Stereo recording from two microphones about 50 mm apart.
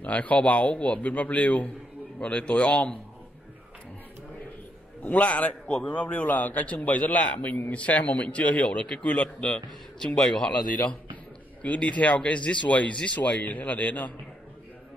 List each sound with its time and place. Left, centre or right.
0.0 s speech: left
5.0 s a man's voice: left
9.9 s a man's voice: centre
11.6 s speech: left